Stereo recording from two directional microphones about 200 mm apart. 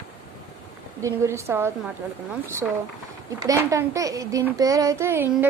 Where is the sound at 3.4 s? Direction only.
15° right (ahead or behind).